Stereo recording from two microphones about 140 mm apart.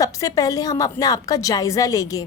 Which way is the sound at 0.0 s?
25° left (ahead or behind).